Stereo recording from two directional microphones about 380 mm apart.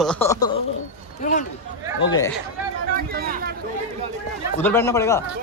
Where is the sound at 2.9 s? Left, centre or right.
Right.